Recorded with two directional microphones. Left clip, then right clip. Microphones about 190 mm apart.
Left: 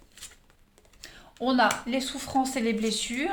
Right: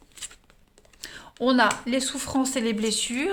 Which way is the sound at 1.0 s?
50° right (ahead or behind).